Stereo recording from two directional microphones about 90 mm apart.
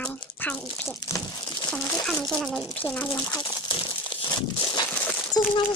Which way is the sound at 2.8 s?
15° left (ahead or behind).